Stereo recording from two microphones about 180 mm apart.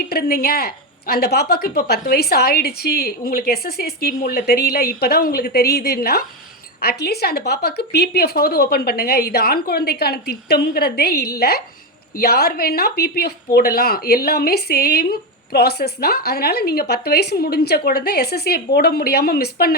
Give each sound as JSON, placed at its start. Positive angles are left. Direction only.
{"t": 0.1, "sound": "speech", "side_deg": 60}